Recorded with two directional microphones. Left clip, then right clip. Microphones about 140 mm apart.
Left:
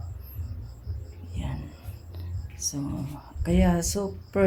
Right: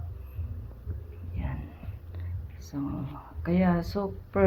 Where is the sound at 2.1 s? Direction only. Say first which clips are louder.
Left 7 dB; 25° left (ahead or behind).